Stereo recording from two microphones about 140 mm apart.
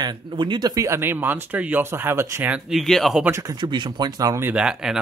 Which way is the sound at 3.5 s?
35° right (ahead or behind).